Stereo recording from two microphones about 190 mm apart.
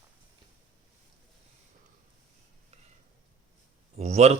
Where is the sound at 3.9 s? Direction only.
35° right (ahead or behind).